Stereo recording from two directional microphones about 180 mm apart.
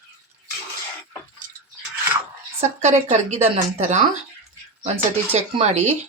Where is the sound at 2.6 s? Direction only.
40° right (ahead or behind).